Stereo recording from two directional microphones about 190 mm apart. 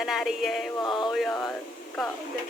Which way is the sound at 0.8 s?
25° left (ahead or behind).